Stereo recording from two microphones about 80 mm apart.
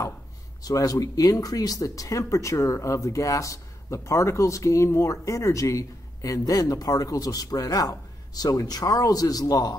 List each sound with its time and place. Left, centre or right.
0.6 s speech: left